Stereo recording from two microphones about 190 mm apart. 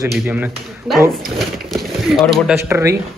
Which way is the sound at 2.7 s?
15° right (ahead or behind).